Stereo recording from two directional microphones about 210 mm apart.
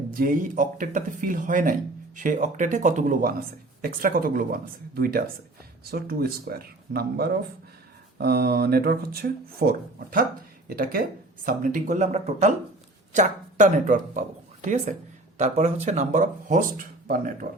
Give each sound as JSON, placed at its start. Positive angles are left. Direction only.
{"t": 0.1, "sound": "speech", "side_deg": -40}
{"t": 11.4, "sound": "speech", "side_deg": -40}